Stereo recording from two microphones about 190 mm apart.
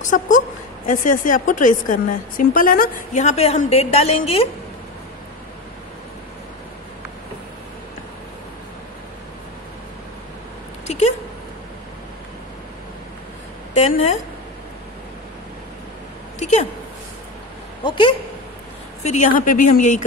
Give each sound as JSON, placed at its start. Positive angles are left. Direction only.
{"t": 0.1, "sound": "a woman's voice", "side_deg": 45}
{"t": 10.9, "sound": "a sound", "side_deg": 35}
{"t": 13.7, "sound": "a woman's voice", "side_deg": 40}
{"t": 16.3, "sound": "a sound", "side_deg": 35}
{"t": 17.8, "sound": "speech", "side_deg": 25}
{"t": 19.0, "sound": "a woman's voice", "side_deg": 40}